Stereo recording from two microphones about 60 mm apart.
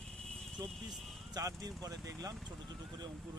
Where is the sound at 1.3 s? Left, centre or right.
Right.